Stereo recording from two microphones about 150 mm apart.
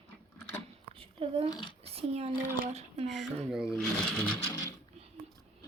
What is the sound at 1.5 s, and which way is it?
Speech, 30° left (ahead or behind).